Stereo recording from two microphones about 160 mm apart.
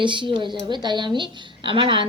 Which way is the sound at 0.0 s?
30° right (ahead or behind).